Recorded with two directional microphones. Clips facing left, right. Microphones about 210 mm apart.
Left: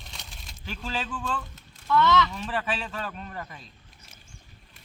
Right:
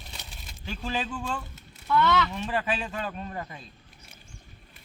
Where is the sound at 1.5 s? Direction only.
5° right (ahead or behind).